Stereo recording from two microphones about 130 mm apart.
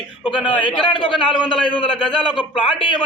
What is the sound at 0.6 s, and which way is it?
A man's voice, 40° left (ahead or behind).